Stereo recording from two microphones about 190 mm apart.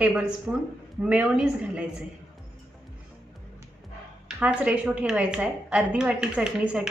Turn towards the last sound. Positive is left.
turn(degrees=-5)  # may be behind; listen again after turning